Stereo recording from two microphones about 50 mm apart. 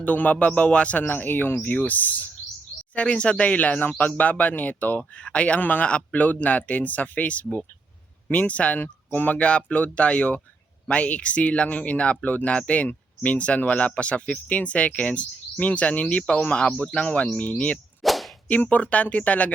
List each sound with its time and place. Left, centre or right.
0.0 s speech: left
2.9 s speech: left
5.5 s speech: left
9.4 s speech: left
18.0 s whip: centre
18.4 s speech: left